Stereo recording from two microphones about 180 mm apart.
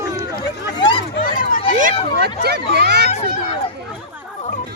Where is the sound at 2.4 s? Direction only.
65° right (ahead or behind).